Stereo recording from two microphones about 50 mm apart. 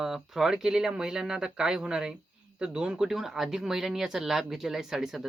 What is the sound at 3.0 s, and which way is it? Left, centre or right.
Speech, centre.